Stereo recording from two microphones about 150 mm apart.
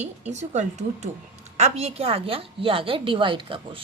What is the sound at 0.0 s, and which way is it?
A woman's voice, 50° right (ahead or behind).